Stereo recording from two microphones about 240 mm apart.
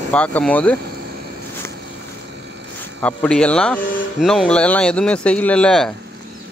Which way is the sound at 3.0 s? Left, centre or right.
Centre.